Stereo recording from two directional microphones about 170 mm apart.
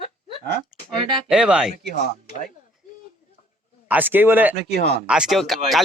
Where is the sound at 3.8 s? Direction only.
10° right (ahead or behind).